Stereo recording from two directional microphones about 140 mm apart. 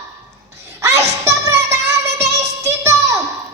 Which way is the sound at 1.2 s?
20° right (ahead or behind).